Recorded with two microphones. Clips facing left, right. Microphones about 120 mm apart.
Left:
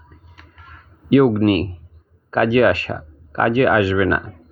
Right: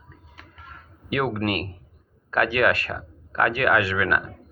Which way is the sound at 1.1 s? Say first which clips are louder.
Left 11 dB; 25° left (ahead or behind).